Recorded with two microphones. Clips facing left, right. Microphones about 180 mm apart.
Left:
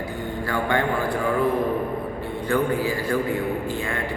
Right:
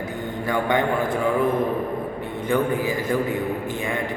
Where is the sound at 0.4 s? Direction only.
20° right (ahead or behind).